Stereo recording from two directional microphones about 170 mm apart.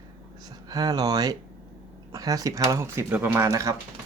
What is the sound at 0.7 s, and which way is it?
Speech, 20° right (ahead or behind).